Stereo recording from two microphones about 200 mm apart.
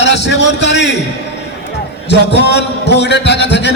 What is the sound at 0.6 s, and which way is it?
Speech, 60° left (ahead or behind).